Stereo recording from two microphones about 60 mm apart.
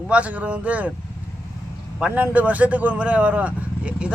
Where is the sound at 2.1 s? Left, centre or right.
Right.